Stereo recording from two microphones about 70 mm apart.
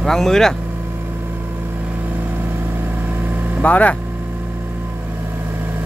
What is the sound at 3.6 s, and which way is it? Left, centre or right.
Speech, left.